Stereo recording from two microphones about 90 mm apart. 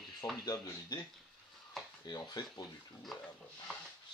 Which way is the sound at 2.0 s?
50° left (ahead or behind).